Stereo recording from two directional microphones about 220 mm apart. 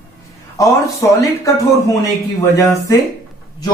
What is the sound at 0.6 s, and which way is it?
Speech, 15° left (ahead or behind).